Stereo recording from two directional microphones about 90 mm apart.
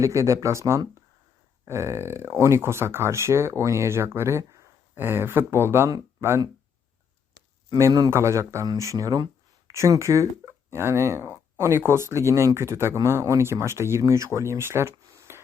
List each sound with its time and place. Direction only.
0.0 s speech: 35° right (ahead or behind)
8.1 s speech: 35° right (ahead or behind)
15.0 s a sound: 35° right (ahead or behind)